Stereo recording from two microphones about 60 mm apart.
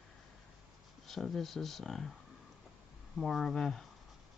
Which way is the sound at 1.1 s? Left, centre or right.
Centre.